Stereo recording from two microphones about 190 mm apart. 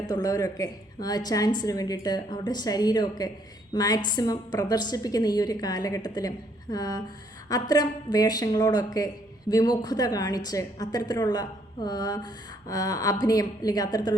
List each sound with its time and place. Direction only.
0.1 s a woman's voice: 20° left (ahead or behind)